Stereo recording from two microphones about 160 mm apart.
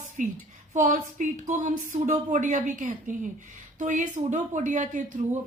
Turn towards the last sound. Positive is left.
turn(degrees=-50)  # may be behind; listen again after turning